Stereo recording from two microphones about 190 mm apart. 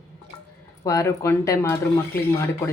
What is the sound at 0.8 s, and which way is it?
Speech, 20° left (ahead or behind).